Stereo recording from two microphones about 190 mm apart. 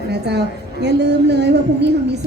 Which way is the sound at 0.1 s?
60° right (ahead or behind).